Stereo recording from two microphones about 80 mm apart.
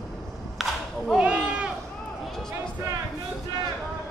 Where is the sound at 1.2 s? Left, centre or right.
Centre.